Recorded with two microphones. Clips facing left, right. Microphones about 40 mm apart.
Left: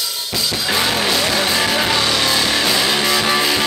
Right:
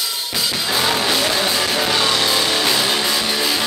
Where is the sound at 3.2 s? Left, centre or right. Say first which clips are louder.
Left 4 dB; left.